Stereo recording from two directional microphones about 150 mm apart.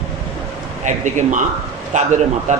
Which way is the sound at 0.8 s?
55° right (ahead or behind).